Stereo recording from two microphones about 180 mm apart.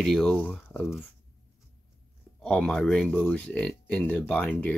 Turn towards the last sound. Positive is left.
turn(degrees=10)  # may be behind; listen again after turning